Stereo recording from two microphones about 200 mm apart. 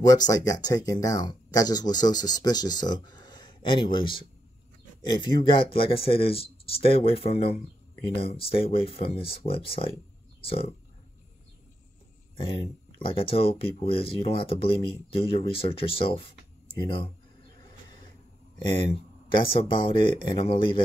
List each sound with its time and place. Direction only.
0.0 s speech: 20° left (ahead or behind)
12.4 s speech: 30° left (ahead or behind)
19.3 s speech: 25° left (ahead or behind)